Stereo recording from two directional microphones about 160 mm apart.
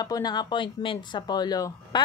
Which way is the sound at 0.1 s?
25° left (ahead or behind).